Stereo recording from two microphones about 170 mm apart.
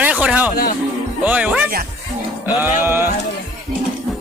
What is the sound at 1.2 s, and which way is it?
Music, 10° right (ahead or behind).